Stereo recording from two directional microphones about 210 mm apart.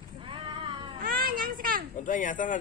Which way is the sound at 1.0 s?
45° right (ahead or behind).